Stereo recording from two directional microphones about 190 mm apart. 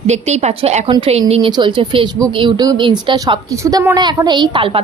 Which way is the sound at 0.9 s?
25° right (ahead or behind).